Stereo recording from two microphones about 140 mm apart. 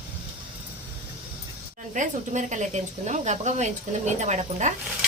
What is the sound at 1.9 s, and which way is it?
Speech, 60° right (ahead or behind).